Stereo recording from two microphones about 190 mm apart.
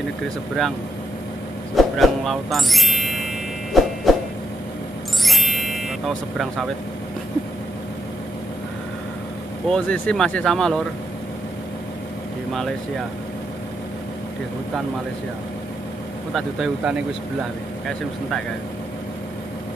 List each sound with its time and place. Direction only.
1.8 s speech: centre (ahead or behind)
3.7 s a sound: centre (ahead or behind)
5.2 s music: centre (ahead or behind)
9.7 s speech: 5° left (ahead or behind)
16.3 s speech: centre (ahead or behind)